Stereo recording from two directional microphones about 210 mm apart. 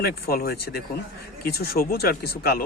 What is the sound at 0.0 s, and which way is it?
Speech, 45° left (ahead or behind).